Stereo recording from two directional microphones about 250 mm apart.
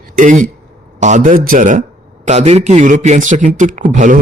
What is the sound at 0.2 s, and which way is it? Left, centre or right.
A man's voice, right.